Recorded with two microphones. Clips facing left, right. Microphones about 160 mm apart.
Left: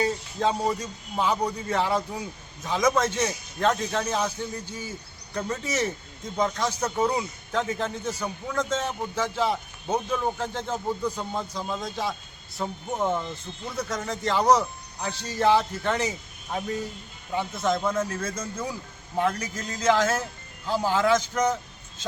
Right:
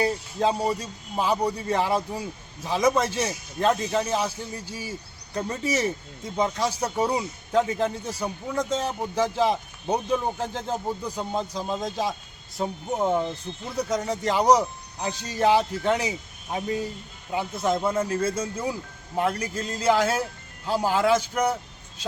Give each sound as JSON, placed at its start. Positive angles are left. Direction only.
{"t": 0.0, "sound": "speech", "side_deg": -10}